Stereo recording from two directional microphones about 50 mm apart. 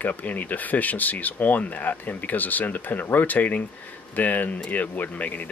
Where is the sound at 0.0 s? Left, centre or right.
Left.